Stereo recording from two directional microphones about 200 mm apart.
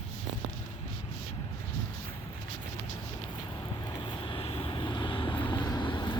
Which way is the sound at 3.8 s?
25° left (ahead or behind).